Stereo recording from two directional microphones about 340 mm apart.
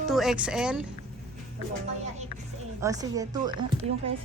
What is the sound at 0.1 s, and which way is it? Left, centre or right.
Speech, centre.